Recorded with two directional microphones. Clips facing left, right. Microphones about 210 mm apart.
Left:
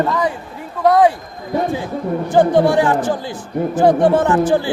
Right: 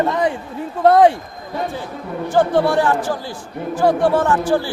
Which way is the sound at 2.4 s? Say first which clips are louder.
Left 3 dB; 15° left (ahead or behind).